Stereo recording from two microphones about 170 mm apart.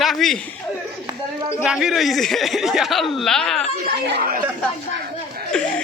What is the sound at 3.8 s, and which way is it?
Speech, 75° right (ahead or behind).